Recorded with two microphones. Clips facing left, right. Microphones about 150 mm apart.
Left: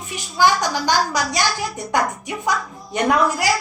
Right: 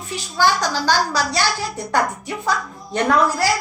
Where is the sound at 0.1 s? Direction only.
15° left (ahead or behind).